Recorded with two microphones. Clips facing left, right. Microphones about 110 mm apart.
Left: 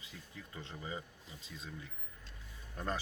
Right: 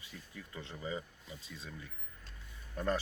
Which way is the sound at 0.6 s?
25° left (ahead or behind).